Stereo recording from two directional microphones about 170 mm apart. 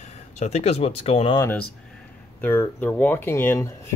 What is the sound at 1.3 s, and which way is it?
Speech, 15° left (ahead or behind).